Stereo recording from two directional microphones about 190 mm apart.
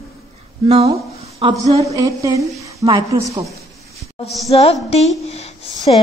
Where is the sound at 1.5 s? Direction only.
20° right (ahead or behind).